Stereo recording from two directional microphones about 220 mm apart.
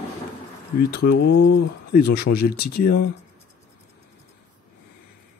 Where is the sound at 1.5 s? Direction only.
50° left (ahead or behind).